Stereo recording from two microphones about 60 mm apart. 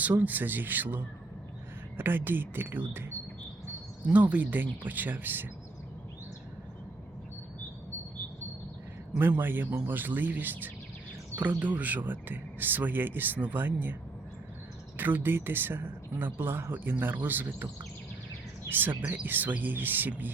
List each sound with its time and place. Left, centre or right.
0.0 s speech: right
4.0 s speech: right
9.1 s speech: right
14.9 s speech: right
18.7 s speech: right